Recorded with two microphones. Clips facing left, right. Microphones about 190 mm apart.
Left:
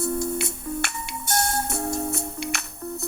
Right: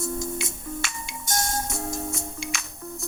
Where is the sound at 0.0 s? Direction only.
65° left (ahead or behind).